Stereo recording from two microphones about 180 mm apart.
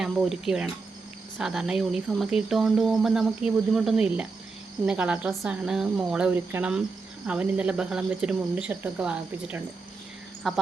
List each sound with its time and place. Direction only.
0.0 s speech: centre (ahead or behind)